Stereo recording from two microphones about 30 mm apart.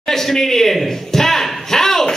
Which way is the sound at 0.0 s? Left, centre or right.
Centre.